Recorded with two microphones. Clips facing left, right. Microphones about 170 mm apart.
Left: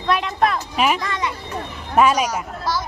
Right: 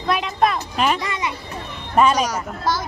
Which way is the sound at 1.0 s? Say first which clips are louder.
Left 1 dB; 10° right (ahead or behind).